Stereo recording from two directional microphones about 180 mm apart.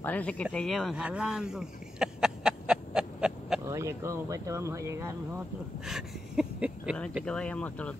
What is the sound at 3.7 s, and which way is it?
Speech, 15° right (ahead or behind).